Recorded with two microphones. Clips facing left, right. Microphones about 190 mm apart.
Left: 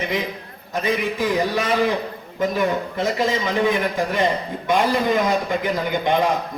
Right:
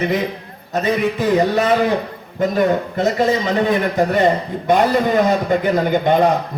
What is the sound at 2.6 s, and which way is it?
A man's voice, 45° right (ahead or behind).